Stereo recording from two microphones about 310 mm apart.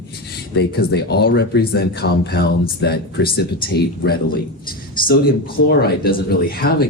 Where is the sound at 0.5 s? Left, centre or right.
Left.